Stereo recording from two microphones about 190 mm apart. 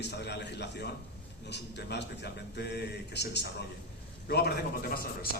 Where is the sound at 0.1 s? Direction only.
60° left (ahead or behind).